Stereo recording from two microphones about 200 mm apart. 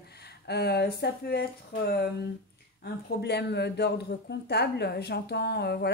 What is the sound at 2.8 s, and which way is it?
Speech, 55° left (ahead or behind).